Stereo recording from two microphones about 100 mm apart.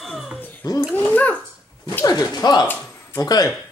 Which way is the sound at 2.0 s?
40° left (ahead or behind).